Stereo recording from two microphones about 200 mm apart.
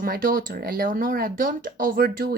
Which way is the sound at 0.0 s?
45° right (ahead or behind).